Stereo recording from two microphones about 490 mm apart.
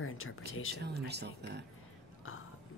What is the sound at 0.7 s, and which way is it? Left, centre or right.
Speech, centre.